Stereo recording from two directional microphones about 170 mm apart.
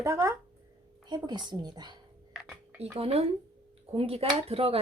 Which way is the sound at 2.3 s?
Centre (ahead or behind).